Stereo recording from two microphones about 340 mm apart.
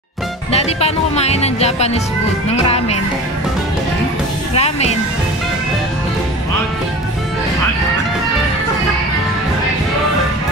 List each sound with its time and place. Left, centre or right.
0.5 s speech: centre
4.6 s music: centre